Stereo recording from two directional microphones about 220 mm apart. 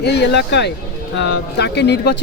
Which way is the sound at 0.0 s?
50° left (ahead or behind).